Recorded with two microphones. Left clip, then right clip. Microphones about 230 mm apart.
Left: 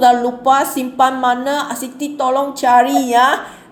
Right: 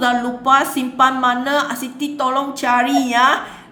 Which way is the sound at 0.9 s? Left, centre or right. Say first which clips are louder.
Left 1 dB; right.